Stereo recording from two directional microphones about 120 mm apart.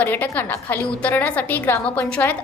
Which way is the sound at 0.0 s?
15° left (ahead or behind).